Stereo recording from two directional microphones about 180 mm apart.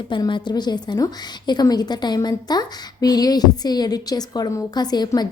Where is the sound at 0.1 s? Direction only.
25° left (ahead or behind).